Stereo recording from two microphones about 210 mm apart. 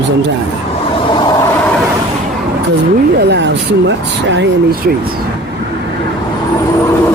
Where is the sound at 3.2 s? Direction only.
55° right (ahead or behind).